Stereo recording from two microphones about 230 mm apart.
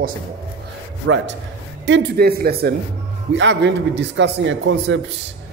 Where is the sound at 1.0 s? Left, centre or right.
Right.